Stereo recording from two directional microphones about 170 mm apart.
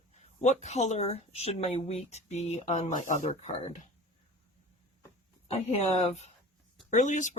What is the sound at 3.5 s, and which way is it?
Speech, 30° left (ahead or behind).